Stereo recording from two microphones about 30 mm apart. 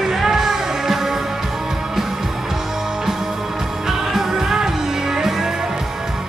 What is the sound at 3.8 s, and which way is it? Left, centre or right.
Music, centre.